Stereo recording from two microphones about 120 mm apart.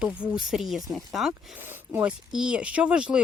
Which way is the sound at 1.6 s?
20° right (ahead or behind).